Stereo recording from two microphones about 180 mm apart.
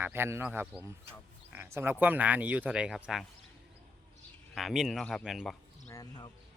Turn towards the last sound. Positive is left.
turn(degrees=20)  # may be behind; listen again after turning